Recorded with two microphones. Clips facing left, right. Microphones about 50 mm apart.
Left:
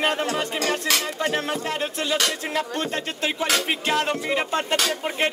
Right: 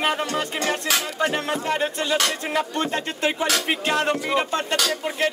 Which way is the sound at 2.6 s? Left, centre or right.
Centre.